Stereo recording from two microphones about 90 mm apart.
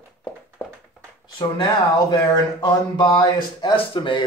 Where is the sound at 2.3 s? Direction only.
50° left (ahead or behind).